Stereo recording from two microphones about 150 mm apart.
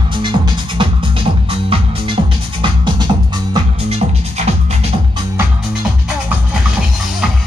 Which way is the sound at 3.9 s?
45° right (ahead or behind).